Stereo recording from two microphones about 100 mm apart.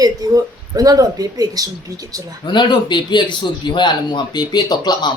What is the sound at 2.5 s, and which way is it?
Speech, 50° left (ahead or behind).